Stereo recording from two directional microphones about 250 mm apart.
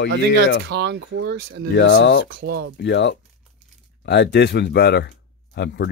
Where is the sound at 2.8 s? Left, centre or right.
Left.